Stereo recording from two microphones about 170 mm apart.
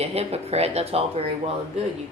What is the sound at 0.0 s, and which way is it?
Speech, 35° right (ahead or behind).